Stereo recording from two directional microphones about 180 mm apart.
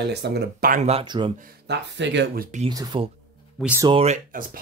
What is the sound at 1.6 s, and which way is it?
Speech, 75° right (ahead or behind).